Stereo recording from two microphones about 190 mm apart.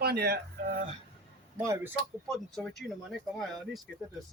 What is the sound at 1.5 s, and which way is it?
Speech, 15° right (ahead or behind).